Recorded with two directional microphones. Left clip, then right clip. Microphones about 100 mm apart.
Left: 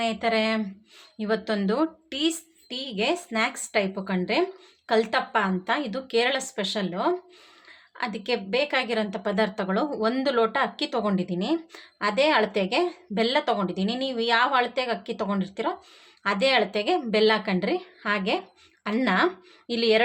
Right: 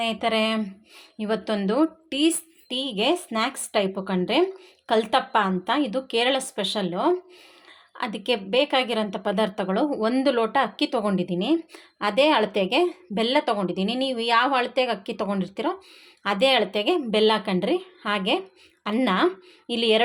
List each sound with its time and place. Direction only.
0.0 s a woman's voice: 35° right (ahead or behind); by 20.0 s 20° right (ahead or behind)